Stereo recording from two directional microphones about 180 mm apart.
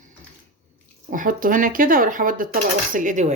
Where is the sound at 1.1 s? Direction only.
45° right (ahead or behind).